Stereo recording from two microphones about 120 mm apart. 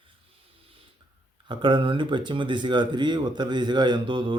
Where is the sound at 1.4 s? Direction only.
45° right (ahead or behind).